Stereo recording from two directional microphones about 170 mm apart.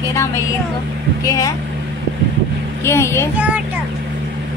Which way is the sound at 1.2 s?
20° left (ahead or behind).